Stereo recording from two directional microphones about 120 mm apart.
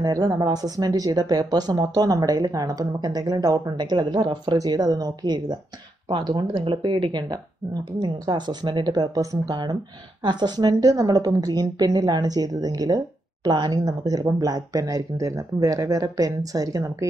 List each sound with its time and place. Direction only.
0.0 s a woman's voice: 30° right (ahead or behind)